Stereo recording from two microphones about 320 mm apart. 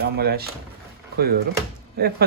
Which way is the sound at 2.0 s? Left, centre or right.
Right.